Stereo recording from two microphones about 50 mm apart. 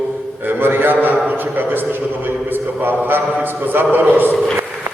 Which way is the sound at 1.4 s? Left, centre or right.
Right.